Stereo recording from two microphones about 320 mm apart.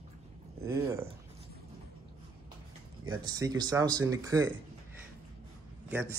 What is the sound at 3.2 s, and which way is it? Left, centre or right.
Speech, centre.